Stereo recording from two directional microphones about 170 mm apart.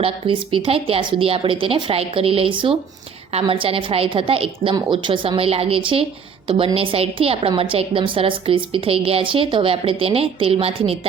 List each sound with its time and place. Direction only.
0.0 s a woman's voice: 30° right (ahead or behind)